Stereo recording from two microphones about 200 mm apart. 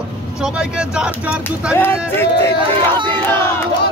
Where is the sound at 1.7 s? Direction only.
10° left (ahead or behind).